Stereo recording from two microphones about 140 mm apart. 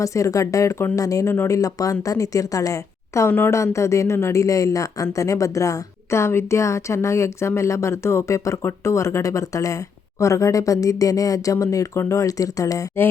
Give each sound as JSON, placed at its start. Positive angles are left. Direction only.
{"t": 0.0, "sound": "speech", "side_deg": 25}